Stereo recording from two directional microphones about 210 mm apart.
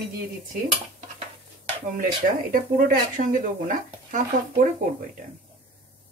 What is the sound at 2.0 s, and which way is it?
Speech, 40° right (ahead or behind).